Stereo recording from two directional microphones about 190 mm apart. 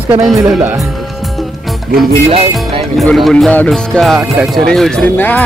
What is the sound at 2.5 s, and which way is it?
Speech, centre (ahead or behind).